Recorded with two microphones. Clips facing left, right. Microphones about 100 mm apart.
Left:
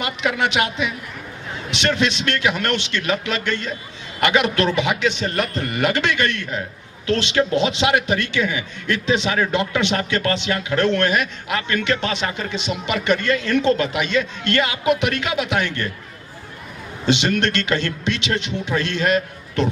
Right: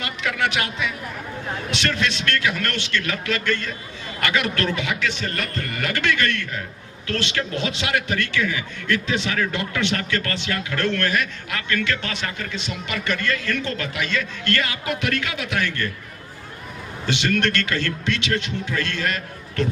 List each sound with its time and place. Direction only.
0.0 s a man's voice: 20° left (ahead or behind)
17.1 s a man's voice: 20° left (ahead or behind)